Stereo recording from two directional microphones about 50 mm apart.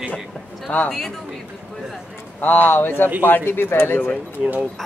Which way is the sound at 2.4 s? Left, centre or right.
Left.